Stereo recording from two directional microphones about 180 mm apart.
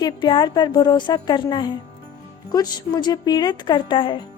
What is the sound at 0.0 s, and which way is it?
Speech, 25° left (ahead or behind).